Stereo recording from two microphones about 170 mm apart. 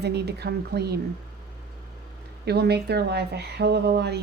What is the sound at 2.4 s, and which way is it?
Speech, 70° right (ahead or behind).